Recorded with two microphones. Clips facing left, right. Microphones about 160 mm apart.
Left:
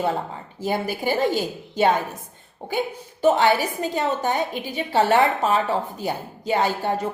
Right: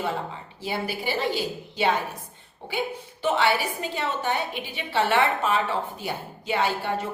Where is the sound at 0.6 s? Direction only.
45° left (ahead or behind).